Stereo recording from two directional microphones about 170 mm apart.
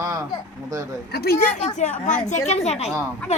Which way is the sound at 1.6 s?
45° left (ahead or behind).